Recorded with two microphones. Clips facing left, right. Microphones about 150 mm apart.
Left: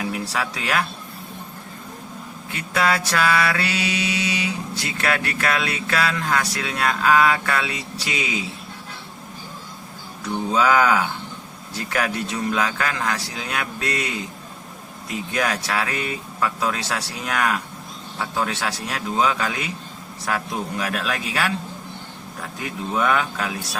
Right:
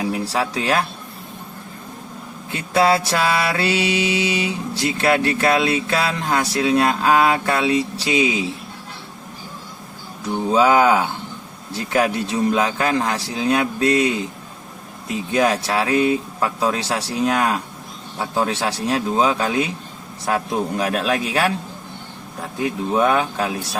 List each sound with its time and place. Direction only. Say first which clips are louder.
0.0 s speech: right 4 dB; 30° right (ahead or behind)
2.6 s mantra: right 5 dB; 30° right (ahead or behind)
10.5 s mantra: right 4 dB; 25° right (ahead or behind)
15.3 s mantra: right 6 dB; 25° right (ahead or behind)
18.2 s a man's voice: right 4 dB; 30° right (ahead or behind)
22.9 s a man's voice: right 3 dB; 30° right (ahead or behind)